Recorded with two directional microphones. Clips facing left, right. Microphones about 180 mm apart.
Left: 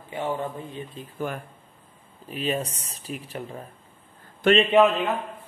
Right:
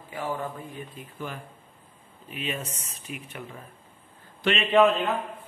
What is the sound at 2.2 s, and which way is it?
Speech, 35° left (ahead or behind).